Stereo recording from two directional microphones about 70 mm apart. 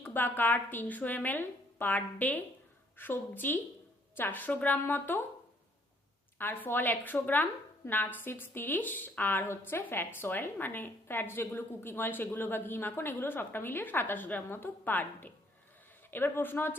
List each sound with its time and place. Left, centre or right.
0.1 s a woman's voice: left
6.4 s a woman's voice: left